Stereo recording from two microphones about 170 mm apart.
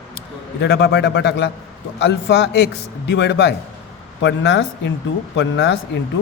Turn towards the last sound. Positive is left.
turn(degrees=90)